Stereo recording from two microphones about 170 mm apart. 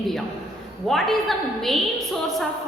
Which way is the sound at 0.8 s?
Centre (ahead or behind).